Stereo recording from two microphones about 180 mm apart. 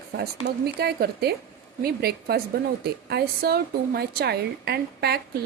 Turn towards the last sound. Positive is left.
turn(degrees=-65)  # may be behind; listen again after turning